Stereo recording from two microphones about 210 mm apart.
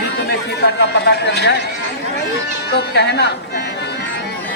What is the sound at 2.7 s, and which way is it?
Speech, 50° left (ahead or behind).